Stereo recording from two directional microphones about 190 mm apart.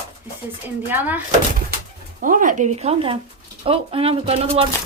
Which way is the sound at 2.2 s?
45° right (ahead or behind).